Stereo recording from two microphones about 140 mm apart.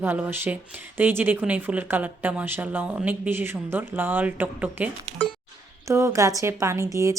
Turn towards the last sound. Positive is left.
turn(degrees=-20)  # may be behind; listen again after turning